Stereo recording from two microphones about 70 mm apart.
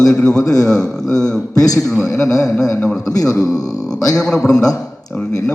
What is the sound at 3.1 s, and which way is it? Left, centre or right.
Speech, left.